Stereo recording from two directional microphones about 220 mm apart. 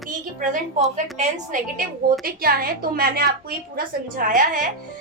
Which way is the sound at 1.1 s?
35° right (ahead or behind).